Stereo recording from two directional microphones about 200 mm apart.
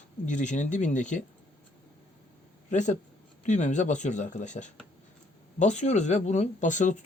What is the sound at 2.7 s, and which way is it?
Speech, 40° left (ahead or behind).